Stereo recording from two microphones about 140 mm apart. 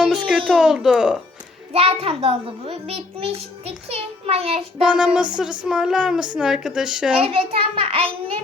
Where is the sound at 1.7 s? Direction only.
45° right (ahead or behind).